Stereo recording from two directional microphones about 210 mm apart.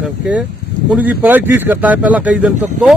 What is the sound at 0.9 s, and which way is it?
Speech, 10° right (ahead or behind).